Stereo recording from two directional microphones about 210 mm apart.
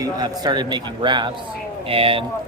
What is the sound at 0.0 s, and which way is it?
A man's voice, 20° right (ahead or behind).